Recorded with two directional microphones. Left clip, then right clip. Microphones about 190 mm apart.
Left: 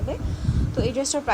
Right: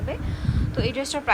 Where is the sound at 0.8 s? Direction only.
20° left (ahead or behind).